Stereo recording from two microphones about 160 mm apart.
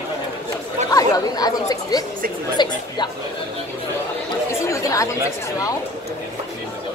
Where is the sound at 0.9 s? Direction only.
25° left (ahead or behind).